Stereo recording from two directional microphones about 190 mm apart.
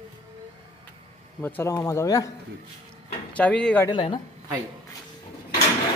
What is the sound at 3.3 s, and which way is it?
Speech, 5° left (ahead or behind).